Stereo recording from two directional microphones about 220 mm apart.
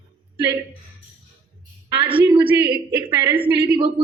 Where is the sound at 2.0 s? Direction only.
25° right (ahead or behind).